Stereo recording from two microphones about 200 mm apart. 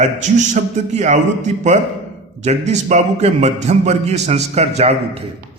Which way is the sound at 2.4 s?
35° right (ahead or behind).